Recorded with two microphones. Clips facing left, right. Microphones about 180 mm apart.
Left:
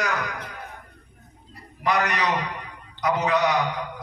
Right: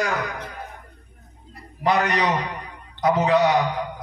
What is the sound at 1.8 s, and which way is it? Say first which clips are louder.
A man's voice: right 3 dB; 30° right (ahead or behind).